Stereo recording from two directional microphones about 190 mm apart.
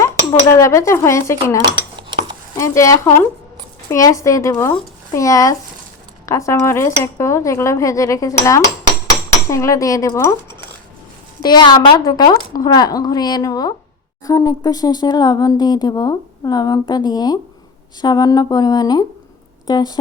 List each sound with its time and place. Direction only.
0.6 s speech: 15° left (ahead or behind)
11.4 s speech: 20° left (ahead or behind)